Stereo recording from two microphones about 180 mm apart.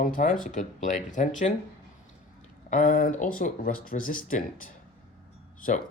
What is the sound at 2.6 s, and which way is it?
Speech, 45° left (ahead or behind).